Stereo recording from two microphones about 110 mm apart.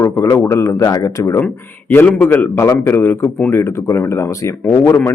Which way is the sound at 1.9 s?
15° left (ahead or behind).